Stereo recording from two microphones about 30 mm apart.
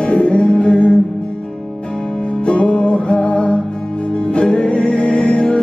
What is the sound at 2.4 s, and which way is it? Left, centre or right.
Music, left.